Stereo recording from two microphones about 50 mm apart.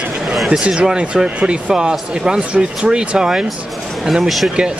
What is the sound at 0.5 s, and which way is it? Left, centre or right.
Speech, right.